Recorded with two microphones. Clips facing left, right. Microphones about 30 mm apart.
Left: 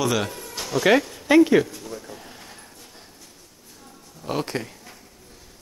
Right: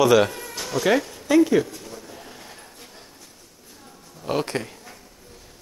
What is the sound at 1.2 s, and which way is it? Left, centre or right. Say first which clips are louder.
Speech: left 1 dB; left.